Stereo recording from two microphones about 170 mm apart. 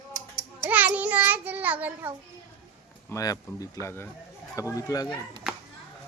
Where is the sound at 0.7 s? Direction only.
10° right (ahead or behind).